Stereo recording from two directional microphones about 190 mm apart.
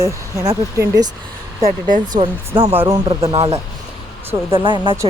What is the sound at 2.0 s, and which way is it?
Speech, 25° right (ahead or behind).